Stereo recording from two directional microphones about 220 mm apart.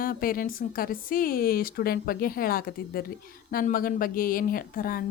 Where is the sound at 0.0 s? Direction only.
40° left (ahead or behind).